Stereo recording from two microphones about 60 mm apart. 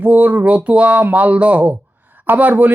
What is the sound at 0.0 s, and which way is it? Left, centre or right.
Speech, right.